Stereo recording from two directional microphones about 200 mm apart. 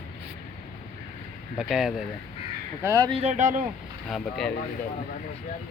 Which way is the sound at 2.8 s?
15° right (ahead or behind).